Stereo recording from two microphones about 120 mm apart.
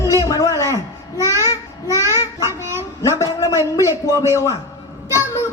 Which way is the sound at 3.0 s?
30° left (ahead or behind).